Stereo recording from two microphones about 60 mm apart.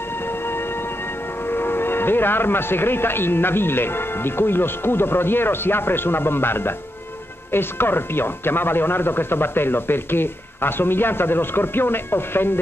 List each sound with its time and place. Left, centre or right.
1.5 s speech: left